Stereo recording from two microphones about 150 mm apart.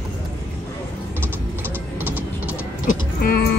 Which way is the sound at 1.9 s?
10° right (ahead or behind).